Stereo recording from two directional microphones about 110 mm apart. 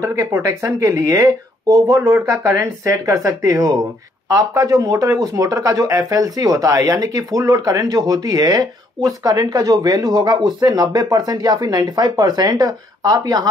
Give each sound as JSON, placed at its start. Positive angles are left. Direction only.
{"t": 0.0, "sound": "speech", "side_deg": -25}